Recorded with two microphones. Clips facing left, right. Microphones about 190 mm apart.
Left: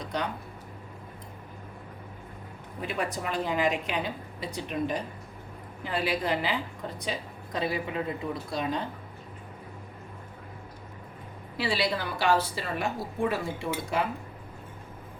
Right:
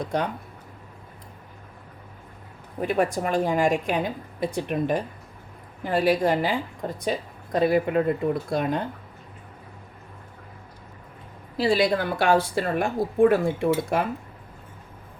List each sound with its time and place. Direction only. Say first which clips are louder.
0.0 s a woman's voice: right 6 dB; 50° right (ahead or behind)
2.8 s a woman's voice: right 8 dB; 50° right (ahead or behind)
11.5 s a woman's voice: right 8 dB; 45° right (ahead or behind)